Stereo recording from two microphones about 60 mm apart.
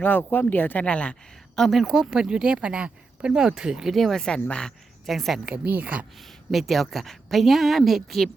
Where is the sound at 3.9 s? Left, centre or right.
Centre.